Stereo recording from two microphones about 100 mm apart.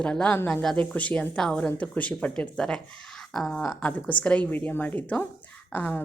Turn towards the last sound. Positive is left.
turn(degrees=15)  # may be behind; listen again after turning